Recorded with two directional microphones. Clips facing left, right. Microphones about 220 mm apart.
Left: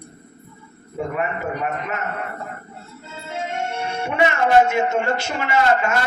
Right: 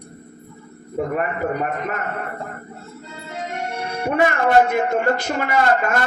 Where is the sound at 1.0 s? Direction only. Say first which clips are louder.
Right 3 dB; 45° right (ahead or behind).